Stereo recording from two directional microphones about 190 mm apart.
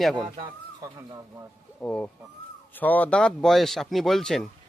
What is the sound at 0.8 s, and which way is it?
Speech, 20° right (ahead or behind).